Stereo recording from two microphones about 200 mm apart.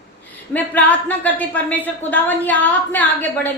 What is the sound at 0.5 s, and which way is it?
A woman's voice, 10° left (ahead or behind).